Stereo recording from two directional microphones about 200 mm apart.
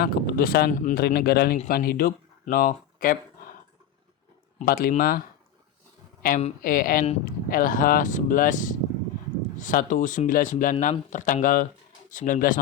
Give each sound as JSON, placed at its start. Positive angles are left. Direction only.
{"t": 0.0, "sound": "speech", "side_deg": 50}
{"t": 4.6, "sound": "speech", "side_deg": 45}
{"t": 6.2, "sound": "a man's voice", "side_deg": 45}